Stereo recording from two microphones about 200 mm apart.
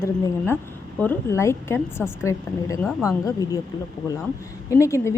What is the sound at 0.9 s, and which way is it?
A woman's voice, 10° left (ahead or behind).